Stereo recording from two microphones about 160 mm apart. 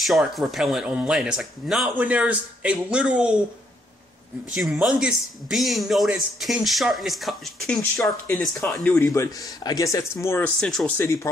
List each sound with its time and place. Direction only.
0.0 s speech: centre (ahead or behind)
4.6 s speech: 5° right (ahead or behind)
8.9 s speech: 15° left (ahead or behind)
10.6 s speech: centre (ahead or behind)